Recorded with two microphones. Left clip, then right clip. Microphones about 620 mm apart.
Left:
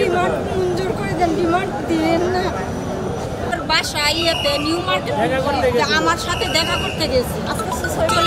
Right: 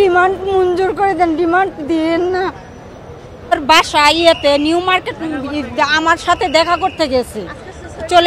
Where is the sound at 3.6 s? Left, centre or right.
Right.